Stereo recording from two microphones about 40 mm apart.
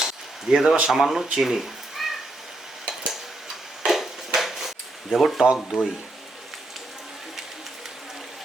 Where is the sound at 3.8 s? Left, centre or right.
Centre.